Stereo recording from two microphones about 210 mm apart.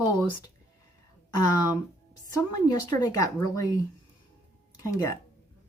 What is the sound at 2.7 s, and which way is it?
Speech, 15° left (ahead or behind).